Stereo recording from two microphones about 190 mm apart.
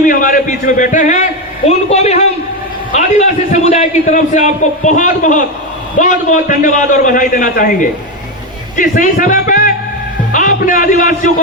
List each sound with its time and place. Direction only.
0.0 s a man's voice: 45° left (ahead or behind)